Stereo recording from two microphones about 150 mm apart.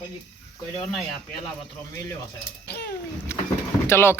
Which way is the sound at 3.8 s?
15° left (ahead or behind).